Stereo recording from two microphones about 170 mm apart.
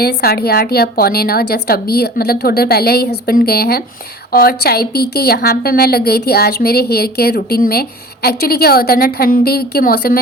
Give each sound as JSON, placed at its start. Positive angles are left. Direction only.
{"t": 0.0, "sound": "a woman's voice", "side_deg": 65}